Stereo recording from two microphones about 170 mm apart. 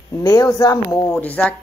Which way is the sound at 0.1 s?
20° left (ahead or behind).